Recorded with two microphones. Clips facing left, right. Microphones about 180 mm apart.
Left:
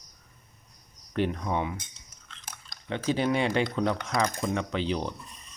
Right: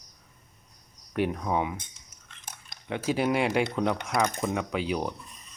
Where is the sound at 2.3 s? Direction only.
15° right (ahead or behind).